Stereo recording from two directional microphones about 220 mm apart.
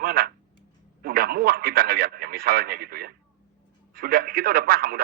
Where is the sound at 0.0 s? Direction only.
45° right (ahead or behind).